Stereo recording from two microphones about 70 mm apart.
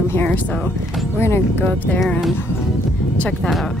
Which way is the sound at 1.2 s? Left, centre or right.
Left.